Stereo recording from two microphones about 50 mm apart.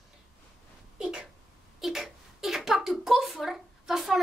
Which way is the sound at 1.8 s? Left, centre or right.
Centre.